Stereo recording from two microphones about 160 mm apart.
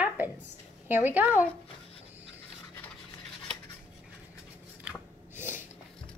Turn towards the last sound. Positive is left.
turn(degrees=-15)  # may be behind; listen again after turning